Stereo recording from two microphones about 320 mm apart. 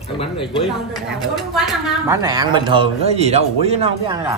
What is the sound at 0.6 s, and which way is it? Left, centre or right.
A woman's voice, centre.